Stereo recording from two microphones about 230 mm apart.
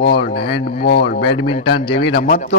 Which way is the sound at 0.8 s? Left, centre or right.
Left.